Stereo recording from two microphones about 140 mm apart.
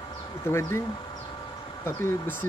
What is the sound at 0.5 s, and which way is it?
Speech, 20° left (ahead or behind).